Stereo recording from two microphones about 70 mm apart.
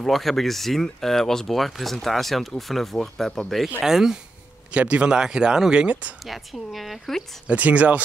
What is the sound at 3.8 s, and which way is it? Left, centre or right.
Speech, centre.